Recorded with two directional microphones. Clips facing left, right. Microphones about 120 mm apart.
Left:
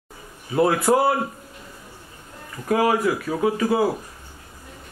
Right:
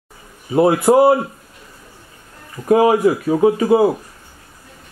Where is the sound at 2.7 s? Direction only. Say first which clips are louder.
Right 7 dB; 25° right (ahead or behind).